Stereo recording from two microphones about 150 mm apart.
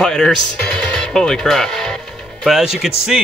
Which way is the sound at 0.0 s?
5° left (ahead or behind).